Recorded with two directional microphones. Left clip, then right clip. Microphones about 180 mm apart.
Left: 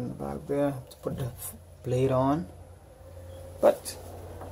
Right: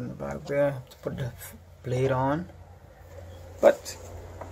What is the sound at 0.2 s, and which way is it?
Speech, 5° left (ahead or behind).